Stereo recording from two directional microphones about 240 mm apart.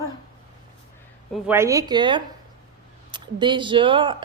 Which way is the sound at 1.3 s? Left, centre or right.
Centre.